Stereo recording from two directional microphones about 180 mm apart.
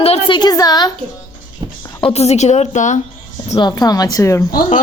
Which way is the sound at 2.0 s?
35° left (ahead or behind).